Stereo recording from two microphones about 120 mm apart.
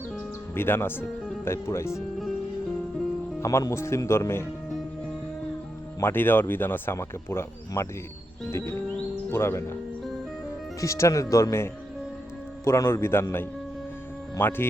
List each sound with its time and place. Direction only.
0.5 s speech: 20° left (ahead or behind)
3.4 s speech: 25° left (ahead or behind)
6.0 s speech: 20° left (ahead or behind)
10.8 s speech: 25° left (ahead or behind)